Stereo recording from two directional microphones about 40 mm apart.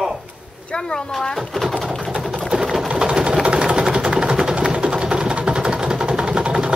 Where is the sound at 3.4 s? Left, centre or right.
Right.